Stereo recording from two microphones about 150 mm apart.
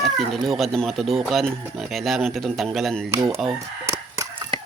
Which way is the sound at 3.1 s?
15° right (ahead or behind).